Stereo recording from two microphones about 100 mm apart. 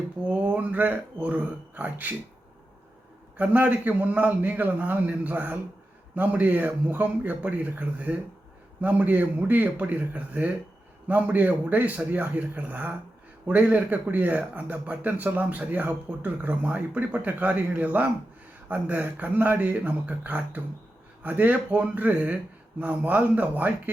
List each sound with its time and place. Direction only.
0.3 s speech: 15° right (ahead or behind)
3.3 s speech: 15° right (ahead or behind)